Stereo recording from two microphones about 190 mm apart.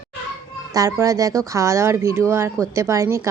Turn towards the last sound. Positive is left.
turn(degrees=-15)  # may be behind; listen again after turning